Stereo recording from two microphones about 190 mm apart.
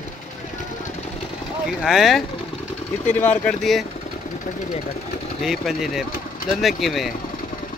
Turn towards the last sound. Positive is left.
turn(degrees=0)  # may be behind; listen again after turning